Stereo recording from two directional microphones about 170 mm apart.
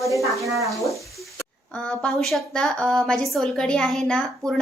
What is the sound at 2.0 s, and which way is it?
A woman's voice, centre (ahead or behind).